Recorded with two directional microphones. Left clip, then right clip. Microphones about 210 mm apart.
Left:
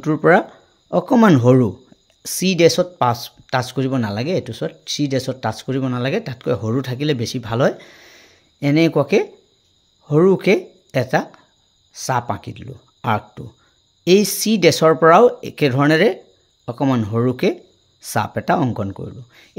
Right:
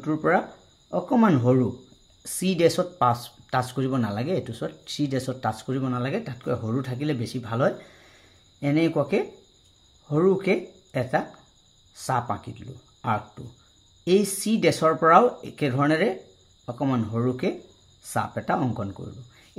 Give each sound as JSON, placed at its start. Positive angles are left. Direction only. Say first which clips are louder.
{"t": 0.0, "sound": "speech", "louder": "left 9 dB", "side_deg": 50}